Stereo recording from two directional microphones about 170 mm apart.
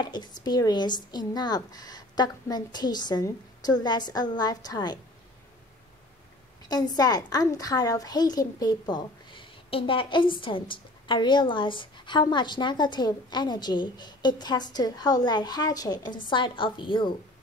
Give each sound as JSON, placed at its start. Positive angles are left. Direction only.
{"t": 0.0, "sound": "a woman's voice", "side_deg": 25}
{"t": 6.6, "sound": "a woman's voice", "side_deg": 25}